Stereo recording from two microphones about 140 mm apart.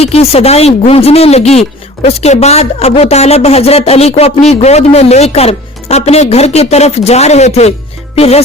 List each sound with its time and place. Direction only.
0.0 s a woman's voice: 45° left (ahead or behind)